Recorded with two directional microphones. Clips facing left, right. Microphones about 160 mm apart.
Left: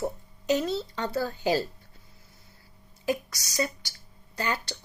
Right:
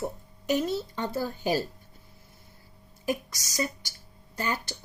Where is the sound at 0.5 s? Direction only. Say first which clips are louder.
Even; 15° right (ahead or behind).